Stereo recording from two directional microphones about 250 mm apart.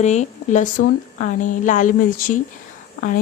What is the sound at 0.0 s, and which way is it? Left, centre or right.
Speech, left.